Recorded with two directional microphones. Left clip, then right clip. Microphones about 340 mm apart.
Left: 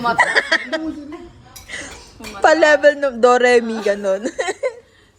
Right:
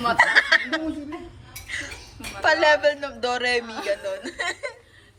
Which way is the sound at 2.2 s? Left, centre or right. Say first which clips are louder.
Left 3 dB; left.